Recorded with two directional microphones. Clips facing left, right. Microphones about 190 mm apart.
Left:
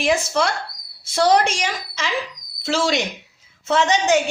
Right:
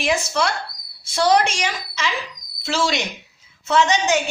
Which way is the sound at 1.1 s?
50° left (ahead or behind).